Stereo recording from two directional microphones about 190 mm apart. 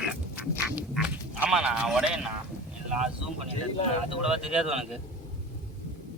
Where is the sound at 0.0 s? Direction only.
5° right (ahead or behind).